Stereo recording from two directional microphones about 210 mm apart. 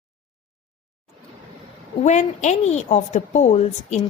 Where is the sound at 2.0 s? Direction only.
35° left (ahead or behind).